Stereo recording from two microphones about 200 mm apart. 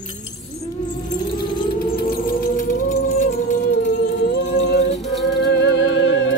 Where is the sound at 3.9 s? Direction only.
60° left (ahead or behind).